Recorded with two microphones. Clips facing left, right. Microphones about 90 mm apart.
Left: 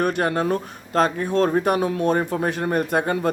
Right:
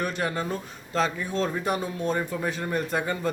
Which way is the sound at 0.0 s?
55° left (ahead or behind).